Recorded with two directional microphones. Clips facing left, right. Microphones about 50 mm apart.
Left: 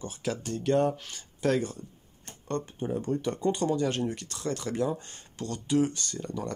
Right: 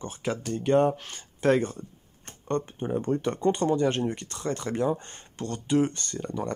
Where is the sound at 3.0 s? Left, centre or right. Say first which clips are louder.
Right 4 dB; right.